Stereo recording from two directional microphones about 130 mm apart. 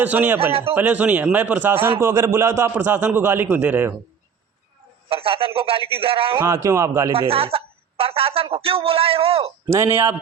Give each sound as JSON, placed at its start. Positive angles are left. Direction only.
{"t": 0.0, "sound": "a man's voice", "side_deg": -15}
{"t": 5.0, "sound": "a man's voice", "side_deg": -45}
{"t": 6.3, "sound": "speech", "side_deg": -20}
{"t": 7.1, "sound": "a woman's voice", "side_deg": -50}
{"t": 9.6, "sound": "speech", "side_deg": -20}